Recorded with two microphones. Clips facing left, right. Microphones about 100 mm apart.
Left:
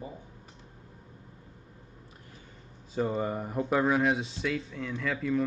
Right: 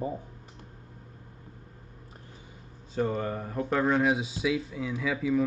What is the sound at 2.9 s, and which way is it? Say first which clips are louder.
Speech: even; 5° left (ahead or behind).